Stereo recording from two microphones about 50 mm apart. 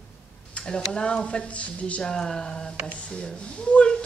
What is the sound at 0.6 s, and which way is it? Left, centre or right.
Speech, centre.